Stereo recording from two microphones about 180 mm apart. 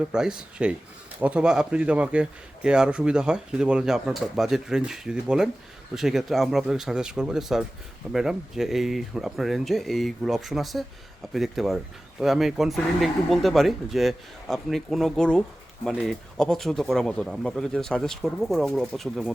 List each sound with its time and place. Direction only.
0.1 s speech: 5° right (ahead or behind)